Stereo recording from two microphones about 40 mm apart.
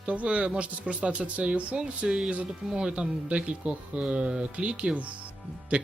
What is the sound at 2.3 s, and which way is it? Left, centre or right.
Speech, right.